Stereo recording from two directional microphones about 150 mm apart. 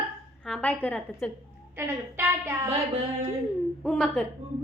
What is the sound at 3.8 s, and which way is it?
Speech, 5° left (ahead or behind).